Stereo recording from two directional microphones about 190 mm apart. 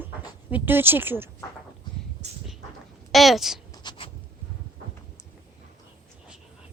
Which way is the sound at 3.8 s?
30° left (ahead or behind).